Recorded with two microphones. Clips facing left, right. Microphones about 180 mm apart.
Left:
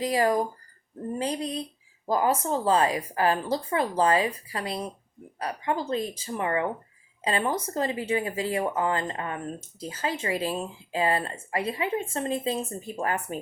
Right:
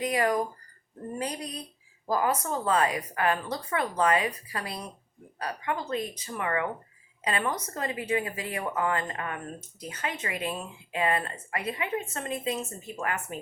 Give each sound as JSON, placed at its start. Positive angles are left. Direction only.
{"t": 0.0, "sound": "speech", "side_deg": 30}